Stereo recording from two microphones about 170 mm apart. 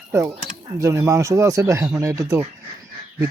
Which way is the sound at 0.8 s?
15° right (ahead or behind).